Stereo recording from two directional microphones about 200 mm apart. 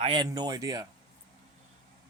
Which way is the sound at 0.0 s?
25° right (ahead or behind).